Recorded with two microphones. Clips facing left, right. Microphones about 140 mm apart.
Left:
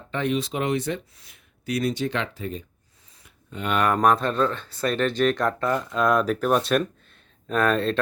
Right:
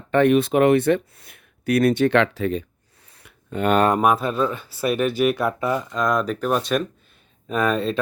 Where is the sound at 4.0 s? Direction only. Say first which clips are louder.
Right 1 dB; 5° right (ahead or behind).